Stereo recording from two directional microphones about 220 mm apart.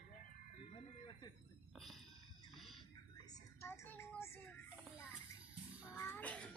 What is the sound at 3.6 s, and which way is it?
Child singing, 10° left (ahead or behind).